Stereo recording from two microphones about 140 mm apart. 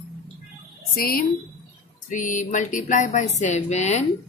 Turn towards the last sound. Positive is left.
turn(degrees=50)  # may be behind; listen again after turning